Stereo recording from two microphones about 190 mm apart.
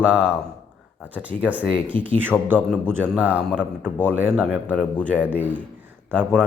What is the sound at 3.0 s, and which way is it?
Speech, 10° right (ahead or behind).